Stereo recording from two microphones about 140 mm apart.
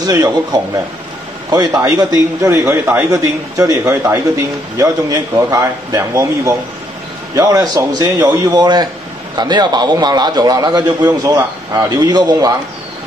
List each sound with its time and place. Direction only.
0.0 s a man's voice: 30° right (ahead or behind)